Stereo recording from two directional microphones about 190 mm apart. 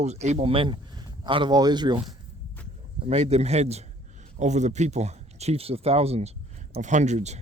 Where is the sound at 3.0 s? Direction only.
35° right (ahead or behind).